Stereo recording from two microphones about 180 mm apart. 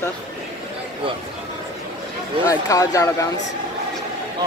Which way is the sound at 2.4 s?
20° left (ahead or behind).